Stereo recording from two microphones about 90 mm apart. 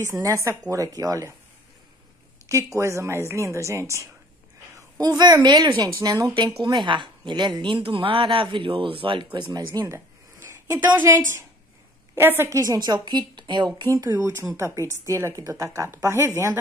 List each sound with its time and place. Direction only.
0.0 s a woman's voice: 35° right (ahead or behind)
2.4 s a woman's voice: 35° right (ahead or behind)
4.7 s a woman's voice: 45° right (ahead or behind)
6.0 s a woman's voice: 35° right (ahead or behind)
6.6 s a woman's voice: 60° right (ahead or behind)
10.8 s a woman's voice: 20° right (ahead or behind)
12.2 s a woman's voice: 25° right (ahead or behind)
12.4 s a woman's voice: 35° right (ahead or behind)
12.7 s a woman's voice: 50° right (ahead or behind)
13.8 s a woman's voice: 40° right (ahead or behind)
14.1 s a woman's voice: 20° right (ahead or behind)
14.6 s a woman's voice: 35° right (ahead or behind)